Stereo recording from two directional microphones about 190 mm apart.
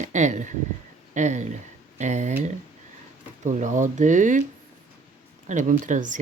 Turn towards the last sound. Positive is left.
turn(degrees=-40)  # may be behind; listen again after turning